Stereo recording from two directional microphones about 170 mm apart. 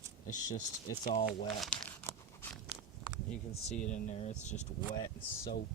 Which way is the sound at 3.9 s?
45° left (ahead or behind).